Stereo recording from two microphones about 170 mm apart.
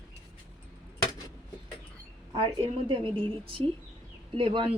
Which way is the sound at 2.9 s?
30° right (ahead or behind).